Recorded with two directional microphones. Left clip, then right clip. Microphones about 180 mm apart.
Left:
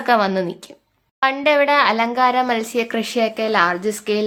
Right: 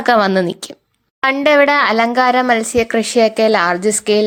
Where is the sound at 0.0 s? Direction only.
40° right (ahead or behind).